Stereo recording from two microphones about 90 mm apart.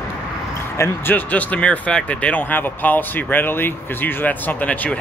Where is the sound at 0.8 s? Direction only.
25° left (ahead or behind).